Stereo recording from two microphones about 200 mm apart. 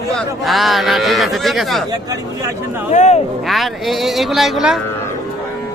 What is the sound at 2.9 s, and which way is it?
Cattle, 35° left (ahead or behind).